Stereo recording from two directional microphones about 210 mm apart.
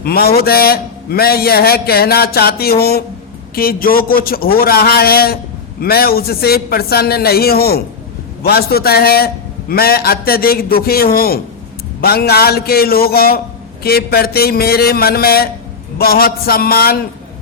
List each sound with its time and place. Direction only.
0.0 s a man's voice: 45° left (ahead or behind)